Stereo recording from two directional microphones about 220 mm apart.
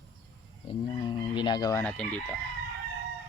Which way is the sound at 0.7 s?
20° left (ahead or behind).